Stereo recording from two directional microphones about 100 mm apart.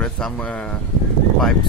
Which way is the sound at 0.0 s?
10° left (ahead or behind).